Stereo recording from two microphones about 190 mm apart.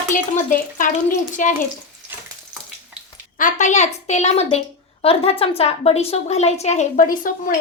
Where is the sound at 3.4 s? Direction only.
40° left (ahead or behind).